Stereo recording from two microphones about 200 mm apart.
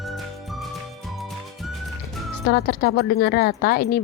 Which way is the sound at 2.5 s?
55° left (ahead or behind).